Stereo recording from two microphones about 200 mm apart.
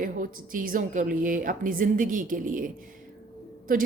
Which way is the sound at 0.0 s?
45° right (ahead or behind).